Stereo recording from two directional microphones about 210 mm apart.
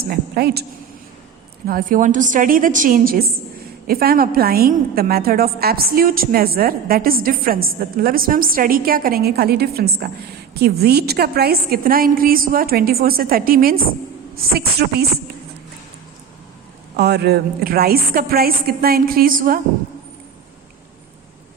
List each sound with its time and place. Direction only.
0.0 s a woman's voice: 45° right (ahead or behind)
1.6 s a woman's voice: 40° right (ahead or behind)
17.0 s a woman's voice: 50° right (ahead or behind)